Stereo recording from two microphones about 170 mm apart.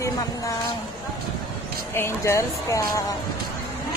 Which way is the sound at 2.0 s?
15° left (ahead or behind).